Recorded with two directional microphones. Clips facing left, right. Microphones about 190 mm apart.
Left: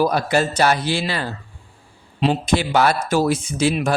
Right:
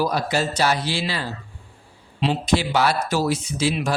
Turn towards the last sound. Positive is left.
turn(degrees=50)  # may be behind; listen again after turning